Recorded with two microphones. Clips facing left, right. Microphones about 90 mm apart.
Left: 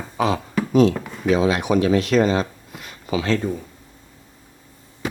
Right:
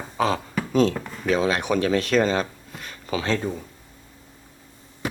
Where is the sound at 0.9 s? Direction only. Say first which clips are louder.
Left 4 dB; 5° left (ahead or behind).